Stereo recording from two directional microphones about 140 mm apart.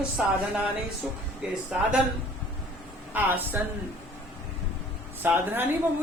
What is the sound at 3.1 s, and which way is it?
Speech, 15° right (ahead or behind).